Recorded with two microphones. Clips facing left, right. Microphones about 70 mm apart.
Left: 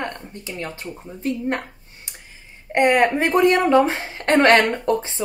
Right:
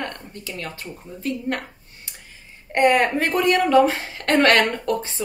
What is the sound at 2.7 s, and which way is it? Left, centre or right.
A woman's voice, left.